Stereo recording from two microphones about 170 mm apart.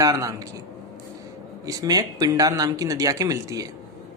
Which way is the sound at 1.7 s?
20° right (ahead or behind).